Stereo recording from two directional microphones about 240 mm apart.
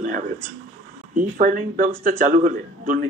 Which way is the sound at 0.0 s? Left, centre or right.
Right.